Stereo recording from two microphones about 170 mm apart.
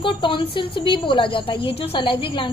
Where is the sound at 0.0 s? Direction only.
30° left (ahead or behind).